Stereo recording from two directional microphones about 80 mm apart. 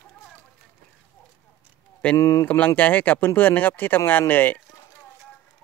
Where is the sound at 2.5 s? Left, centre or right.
Left.